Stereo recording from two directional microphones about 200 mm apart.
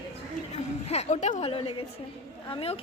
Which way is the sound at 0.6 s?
35° left (ahead or behind).